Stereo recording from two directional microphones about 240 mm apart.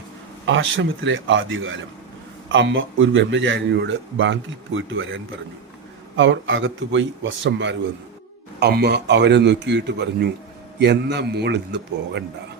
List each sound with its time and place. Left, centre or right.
0.4 s a man's voice: right